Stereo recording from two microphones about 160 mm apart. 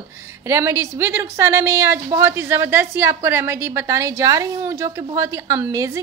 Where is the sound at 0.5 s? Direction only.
15° right (ahead or behind).